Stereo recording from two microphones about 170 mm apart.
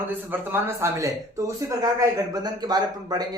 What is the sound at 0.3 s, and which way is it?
Speech, 15° right (ahead or behind).